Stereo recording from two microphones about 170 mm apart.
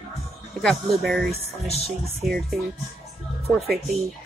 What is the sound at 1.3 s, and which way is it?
Music, 40° left (ahead or behind).